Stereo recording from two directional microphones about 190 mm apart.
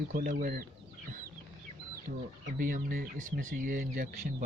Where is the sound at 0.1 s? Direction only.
45° right (ahead or behind).